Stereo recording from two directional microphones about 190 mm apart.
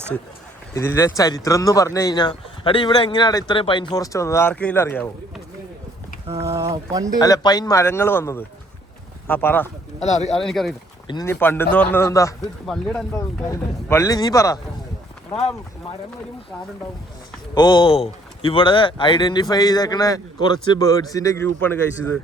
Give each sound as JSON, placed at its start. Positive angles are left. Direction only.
{"t": 0.7, "sound": "a man's voice", "side_deg": 15}
{"t": 6.3, "sound": "speech", "side_deg": -15}
{"t": 7.2, "sound": "speech", "side_deg": 20}
{"t": 10.0, "sound": "speech", "side_deg": 35}
{"t": 10.4, "sound": "speech", "side_deg": 0}
{"t": 11.1, "sound": "speech", "side_deg": 15}
{"t": 12.6, "sound": "speech", "side_deg": 0}
{"t": 13.1, "sound": "speech", "side_deg": 15}
{"t": 17.5, "sound": "a man's voice", "side_deg": 25}